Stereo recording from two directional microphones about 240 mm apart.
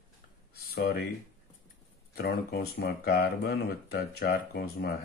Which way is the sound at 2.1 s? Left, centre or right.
Left.